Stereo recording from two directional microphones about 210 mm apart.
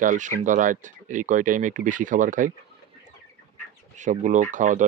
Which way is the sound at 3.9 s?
35° right (ahead or behind).